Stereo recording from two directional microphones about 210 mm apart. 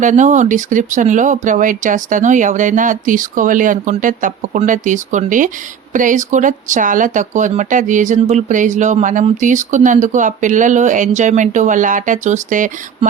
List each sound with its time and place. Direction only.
0.0 s speech: 35° right (ahead or behind)